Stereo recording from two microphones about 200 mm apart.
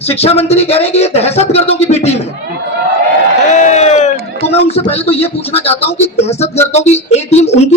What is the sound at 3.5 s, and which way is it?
Speech, 35° left (ahead or behind).